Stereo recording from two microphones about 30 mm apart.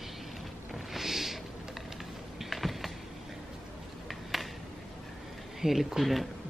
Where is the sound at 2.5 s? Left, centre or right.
Centre.